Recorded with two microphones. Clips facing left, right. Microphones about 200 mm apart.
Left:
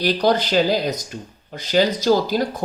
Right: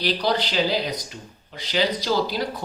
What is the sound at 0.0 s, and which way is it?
Speech, 45° left (ahead or behind).